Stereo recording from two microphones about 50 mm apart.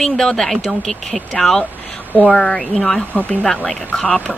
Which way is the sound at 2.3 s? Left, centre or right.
Centre.